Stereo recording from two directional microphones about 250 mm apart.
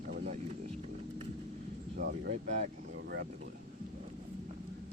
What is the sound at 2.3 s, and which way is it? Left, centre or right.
Speech, right.